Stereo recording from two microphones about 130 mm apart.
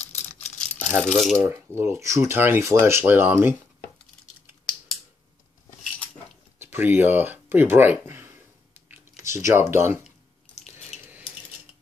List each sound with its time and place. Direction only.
0.6 s a sound: 10° left (ahead or behind)
1.8 s speech: 20° right (ahead or behind)
6.6 s speech: 15° right (ahead or behind)
8.7 s typing: 20° right (ahead or behind)
9.5 s speech: 20° right (ahead or behind)